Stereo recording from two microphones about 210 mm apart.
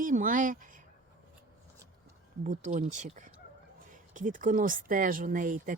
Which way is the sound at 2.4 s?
35° right (ahead or behind).